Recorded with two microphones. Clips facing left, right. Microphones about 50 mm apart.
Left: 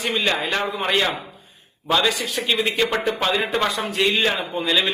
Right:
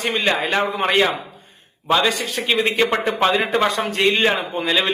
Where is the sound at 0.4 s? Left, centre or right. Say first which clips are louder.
Right 3 dB; centre.